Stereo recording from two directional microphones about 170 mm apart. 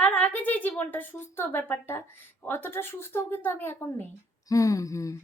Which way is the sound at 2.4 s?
10° left (ahead or behind).